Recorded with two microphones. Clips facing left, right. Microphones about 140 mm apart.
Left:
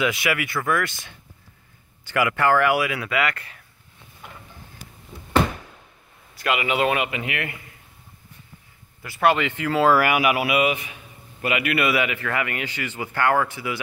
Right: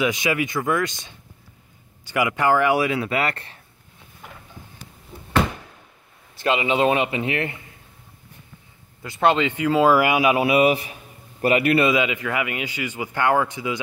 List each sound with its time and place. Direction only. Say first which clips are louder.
0.0 s speech: right 2 dB; 20° right (ahead or behind)
6.3 s speech: right 3 dB; 25° right (ahead or behind)
9.0 s a man's voice: right 1 dB; 20° right (ahead or behind)